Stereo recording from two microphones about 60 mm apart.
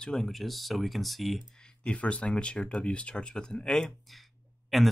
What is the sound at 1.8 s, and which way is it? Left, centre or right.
Speech, centre.